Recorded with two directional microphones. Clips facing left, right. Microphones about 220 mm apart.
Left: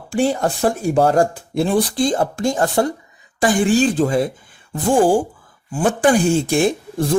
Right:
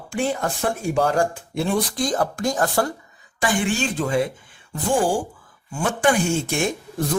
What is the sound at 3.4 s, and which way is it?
Speech, 35° left (ahead or behind).